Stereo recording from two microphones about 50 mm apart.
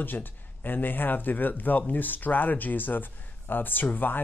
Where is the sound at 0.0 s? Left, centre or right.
Left.